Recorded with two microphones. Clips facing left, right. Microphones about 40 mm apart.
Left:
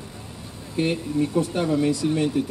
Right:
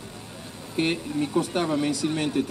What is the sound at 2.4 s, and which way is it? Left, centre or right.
Speech, right.